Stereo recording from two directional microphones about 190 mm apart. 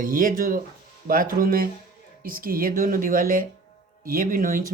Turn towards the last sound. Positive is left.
turn(degrees=-50)  # may be behind; listen again after turning